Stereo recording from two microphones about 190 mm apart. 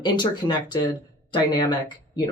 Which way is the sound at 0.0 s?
25° left (ahead or behind).